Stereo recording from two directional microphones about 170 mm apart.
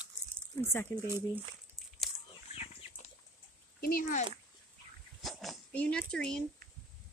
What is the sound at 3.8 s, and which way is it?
Speech, 55° left (ahead or behind).